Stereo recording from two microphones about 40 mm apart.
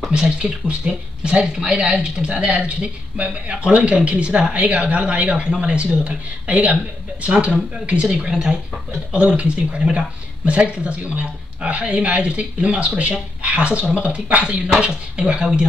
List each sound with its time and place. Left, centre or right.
0.1 s speech: right
2.2 s speech: right
8.1 s speech: centre
9.1 s speech: right